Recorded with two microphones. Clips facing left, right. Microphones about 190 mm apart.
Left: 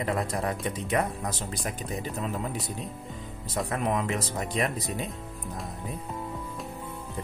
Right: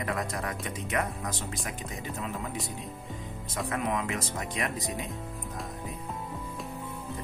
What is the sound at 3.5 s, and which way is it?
Speech, 35° left (ahead or behind).